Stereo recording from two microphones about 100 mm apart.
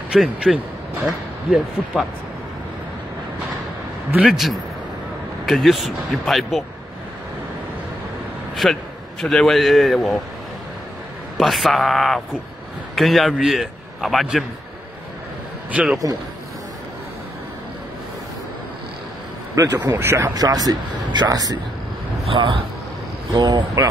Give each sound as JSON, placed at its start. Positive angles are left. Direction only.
{"t": 0.1, "sound": "speech", "side_deg": -5}
{"t": 4.1, "sound": "speech", "side_deg": -10}
{"t": 8.6, "sound": "speech", "side_deg": 0}
{"t": 11.3, "sound": "a man's voice", "side_deg": 0}
{"t": 15.7, "sound": "speech", "side_deg": -10}
{"t": 19.5, "sound": "speech", "side_deg": -30}
{"t": 20.2, "sound": "speech", "side_deg": -40}
{"t": 22.2, "sound": "a man's voice", "side_deg": -55}
{"t": 23.3, "sound": "speech", "side_deg": -45}